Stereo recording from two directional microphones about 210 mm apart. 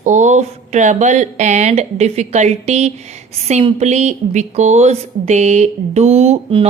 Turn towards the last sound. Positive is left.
turn(degrees=-25)  # may be behind; listen again after turning